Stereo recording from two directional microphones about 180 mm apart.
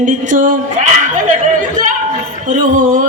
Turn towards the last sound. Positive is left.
turn(degrees=-45)  # may be behind; listen again after turning